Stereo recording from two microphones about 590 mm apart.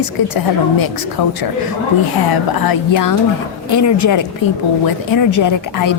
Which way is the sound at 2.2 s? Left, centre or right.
Left.